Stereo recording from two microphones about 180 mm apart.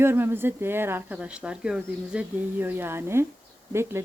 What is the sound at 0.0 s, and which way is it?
Speech, 10° right (ahead or behind).